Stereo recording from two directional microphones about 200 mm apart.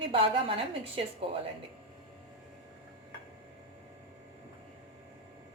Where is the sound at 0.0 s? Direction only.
25° right (ahead or behind).